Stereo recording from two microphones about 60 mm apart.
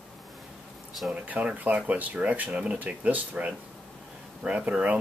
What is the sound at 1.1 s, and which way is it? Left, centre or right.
Speech, right.